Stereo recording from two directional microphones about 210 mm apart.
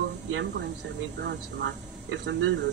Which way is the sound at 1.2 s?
55° right (ahead or behind).